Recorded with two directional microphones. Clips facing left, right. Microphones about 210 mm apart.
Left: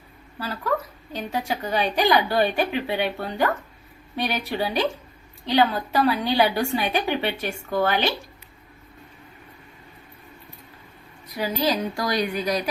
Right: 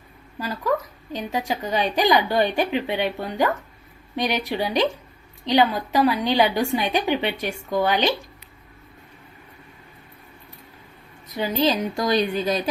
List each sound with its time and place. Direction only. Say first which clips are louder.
0.3 s a woman's voice: right 2 dB; 15° right (ahead or behind)
11.3 s a woman's voice: right 2 dB; 25° right (ahead or behind)